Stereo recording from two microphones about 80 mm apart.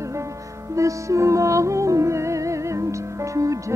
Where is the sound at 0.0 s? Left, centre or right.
Right.